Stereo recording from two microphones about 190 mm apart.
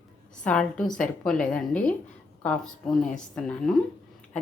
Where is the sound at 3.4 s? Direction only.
5° left (ahead or behind).